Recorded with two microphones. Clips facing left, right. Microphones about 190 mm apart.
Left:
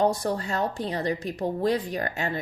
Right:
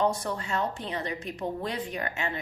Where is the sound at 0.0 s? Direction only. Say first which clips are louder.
Left 4 dB; 35° left (ahead or behind).